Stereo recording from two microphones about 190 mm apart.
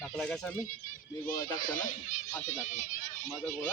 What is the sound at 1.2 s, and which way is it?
Speech, 45° left (ahead or behind).